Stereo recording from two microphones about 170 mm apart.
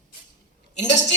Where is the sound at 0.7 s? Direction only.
45° left (ahead or behind).